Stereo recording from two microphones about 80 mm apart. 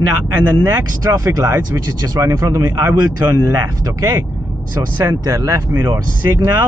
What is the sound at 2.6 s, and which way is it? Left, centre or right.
Speech, right.